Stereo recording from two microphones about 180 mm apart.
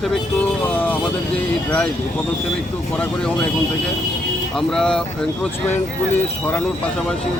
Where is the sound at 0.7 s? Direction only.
10° left (ahead or behind).